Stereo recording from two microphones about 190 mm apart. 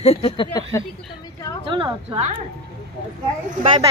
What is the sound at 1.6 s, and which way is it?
Speech, 25° right (ahead or behind).